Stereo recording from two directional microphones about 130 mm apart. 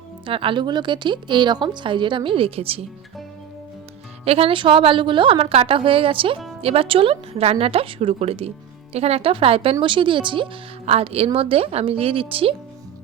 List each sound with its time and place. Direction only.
0.3 s a woman's voice: 40° right (ahead or behind)
4.3 s speech: 45° right (ahead or behind)